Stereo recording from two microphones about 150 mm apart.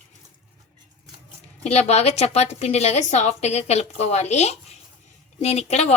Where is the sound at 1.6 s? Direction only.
45° left (ahead or behind).